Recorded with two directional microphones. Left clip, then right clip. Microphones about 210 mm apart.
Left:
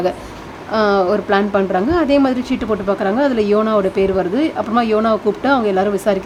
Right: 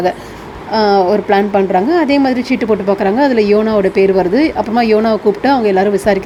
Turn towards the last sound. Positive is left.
turn(degrees=-5)  # may be behind; listen again after turning